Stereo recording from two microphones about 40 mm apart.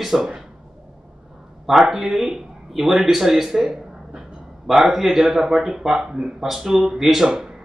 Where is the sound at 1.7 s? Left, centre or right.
Centre.